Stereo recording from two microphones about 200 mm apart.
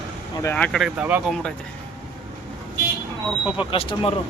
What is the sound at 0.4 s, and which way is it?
Speech, 5° left (ahead or behind).